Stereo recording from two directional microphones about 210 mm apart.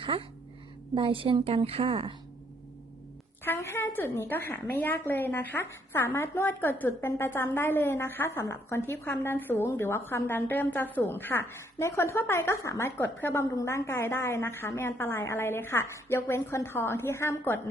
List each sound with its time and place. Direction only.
0.0 s a woman's voice: 25° right (ahead or behind)
3.4 s a woman's voice: 10° left (ahead or behind)